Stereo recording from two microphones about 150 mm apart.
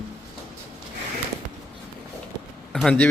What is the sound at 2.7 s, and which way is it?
Speech, 5° left (ahead or behind).